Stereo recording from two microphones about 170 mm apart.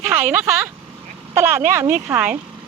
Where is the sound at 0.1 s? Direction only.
10° right (ahead or behind).